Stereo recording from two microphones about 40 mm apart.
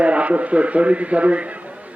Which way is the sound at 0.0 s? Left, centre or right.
Right.